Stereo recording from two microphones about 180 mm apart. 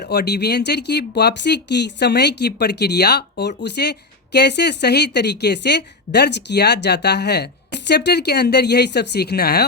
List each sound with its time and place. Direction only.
0.0 s speech: 65° left (ahead or behind)